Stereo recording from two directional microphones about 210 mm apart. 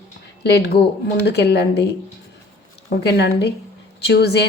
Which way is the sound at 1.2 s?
55° left (ahead or behind).